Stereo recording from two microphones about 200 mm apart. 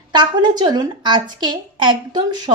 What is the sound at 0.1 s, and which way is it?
A woman's voice, 20° right (ahead or behind).